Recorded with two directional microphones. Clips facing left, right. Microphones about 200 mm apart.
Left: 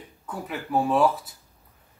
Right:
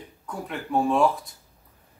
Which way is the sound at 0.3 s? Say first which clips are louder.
Even; 5° left (ahead or behind).